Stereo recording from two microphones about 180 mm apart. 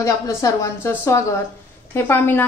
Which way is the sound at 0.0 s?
15° left (ahead or behind).